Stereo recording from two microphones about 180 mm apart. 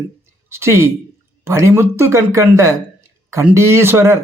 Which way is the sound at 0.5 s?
15° right (ahead or behind).